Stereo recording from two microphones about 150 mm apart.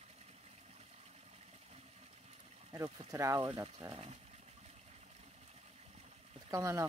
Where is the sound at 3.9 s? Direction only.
45° right (ahead or behind).